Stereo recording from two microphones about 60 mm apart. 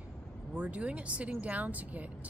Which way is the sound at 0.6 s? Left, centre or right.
Right.